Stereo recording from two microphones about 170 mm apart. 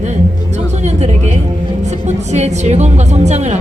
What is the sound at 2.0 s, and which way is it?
A woman's voice, 40° right (ahead or behind).